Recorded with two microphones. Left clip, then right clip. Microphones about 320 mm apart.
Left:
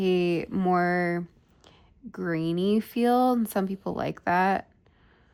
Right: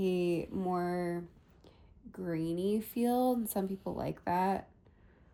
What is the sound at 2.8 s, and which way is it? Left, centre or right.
Speech, centre.